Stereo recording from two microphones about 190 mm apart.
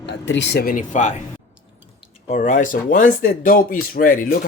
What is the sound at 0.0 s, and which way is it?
Speech, 70° left (ahead or behind).